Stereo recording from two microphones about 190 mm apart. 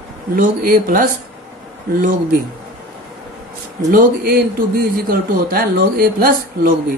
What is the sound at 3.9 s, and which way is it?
A woman's voice, 55° right (ahead or behind).